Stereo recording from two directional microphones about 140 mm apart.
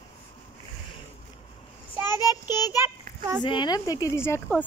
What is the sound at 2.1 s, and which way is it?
Child singing, 30° left (ahead or behind).